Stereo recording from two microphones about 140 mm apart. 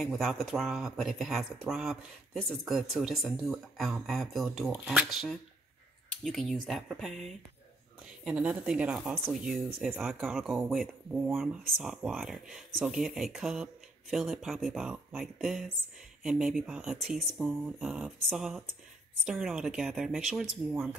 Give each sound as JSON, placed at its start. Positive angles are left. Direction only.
{"t": 0.0, "sound": "speech", "side_deg": 0}